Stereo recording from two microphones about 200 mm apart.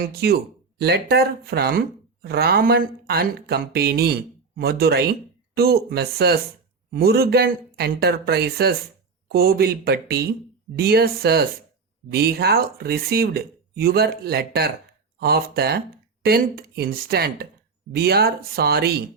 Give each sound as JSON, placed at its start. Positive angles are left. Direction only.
{"t": 0.0, "sound": "speech", "side_deg": -50}